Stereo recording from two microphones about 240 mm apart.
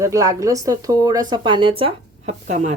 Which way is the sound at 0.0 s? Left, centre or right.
Centre.